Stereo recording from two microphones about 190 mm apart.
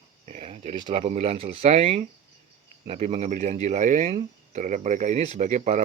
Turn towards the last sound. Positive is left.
turn(degrees=-40)  # may be behind; listen again after turning